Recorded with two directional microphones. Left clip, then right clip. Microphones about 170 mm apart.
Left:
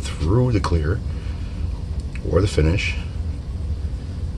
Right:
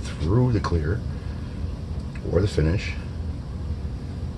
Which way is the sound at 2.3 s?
25° left (ahead or behind).